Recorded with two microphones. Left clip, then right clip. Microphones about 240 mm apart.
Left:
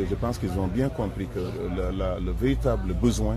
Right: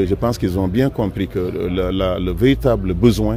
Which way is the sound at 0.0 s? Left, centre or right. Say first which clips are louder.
Right 10 dB; right.